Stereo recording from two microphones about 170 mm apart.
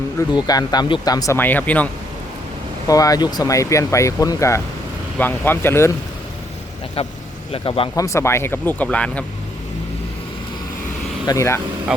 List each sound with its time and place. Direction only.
0.2 s speech: 20° left (ahead or behind)
2.8 s speech: 20° left (ahead or behind)
7.5 s speech: 30° left (ahead or behind)
8.0 s speech: 15° left (ahead or behind)
11.3 s speech: 15° left (ahead or behind)
11.9 s speech: 5° right (ahead or behind)